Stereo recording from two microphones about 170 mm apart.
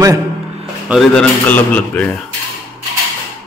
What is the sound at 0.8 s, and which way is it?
A man's voice, centre (ahead or behind).